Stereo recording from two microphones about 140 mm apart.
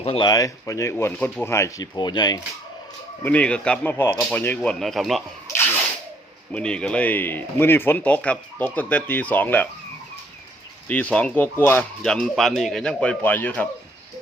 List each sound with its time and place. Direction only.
0.0 s speech: 35° left (ahead or behind)
3.2 s speech: 10° left (ahead or behind)
3.9 s speech: 20° left (ahead or behind); by 5.2 s centre (ahead or behind)
6.5 s speech: 5° left (ahead or behind)
10.8 s speech: 10° left (ahead or behind)
12.0 s speech: 5° left (ahead or behind)